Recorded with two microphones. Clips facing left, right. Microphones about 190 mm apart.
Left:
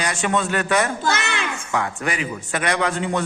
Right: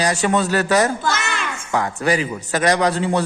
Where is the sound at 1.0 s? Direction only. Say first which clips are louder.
Even; 60° left (ahead or behind).